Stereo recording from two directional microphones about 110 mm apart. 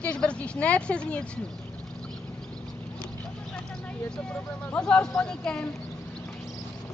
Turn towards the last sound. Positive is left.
turn(degrees=10)  # may be behind; listen again after turning